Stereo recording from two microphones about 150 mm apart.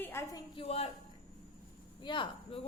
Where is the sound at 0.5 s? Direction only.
40° left (ahead or behind).